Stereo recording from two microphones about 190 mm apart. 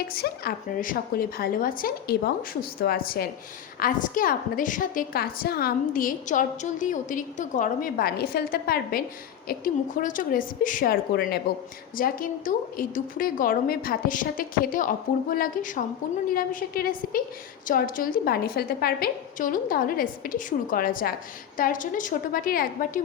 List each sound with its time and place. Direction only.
0.1 s a woman's voice: 55° left (ahead or behind)